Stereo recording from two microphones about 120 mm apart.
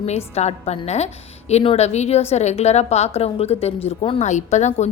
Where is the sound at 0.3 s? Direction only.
65° left (ahead or behind).